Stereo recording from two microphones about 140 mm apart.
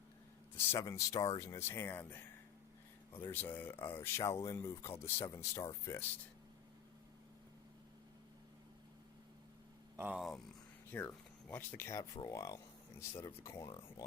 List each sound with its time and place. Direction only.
0.5 s speech: 20° left (ahead or behind)
10.0 s speech: 5° right (ahead or behind)
10.9 s speech: 15° left (ahead or behind)